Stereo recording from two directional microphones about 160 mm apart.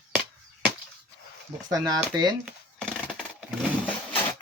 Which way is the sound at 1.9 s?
25° right (ahead or behind).